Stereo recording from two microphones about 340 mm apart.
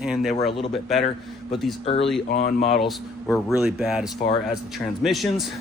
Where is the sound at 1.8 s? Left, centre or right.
Centre.